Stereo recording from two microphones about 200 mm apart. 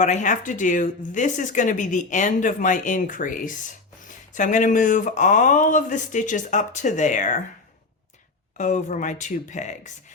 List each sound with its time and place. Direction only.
0.0 s speech: 40° left (ahead or behind)
8.5 s speech: 40° left (ahead or behind)